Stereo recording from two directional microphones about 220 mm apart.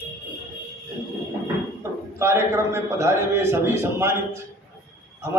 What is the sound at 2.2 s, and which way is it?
A man's voice, 10° right (ahead or behind).